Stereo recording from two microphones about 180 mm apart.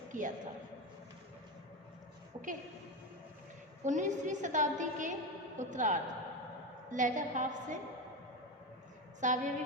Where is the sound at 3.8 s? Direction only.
40° right (ahead or behind).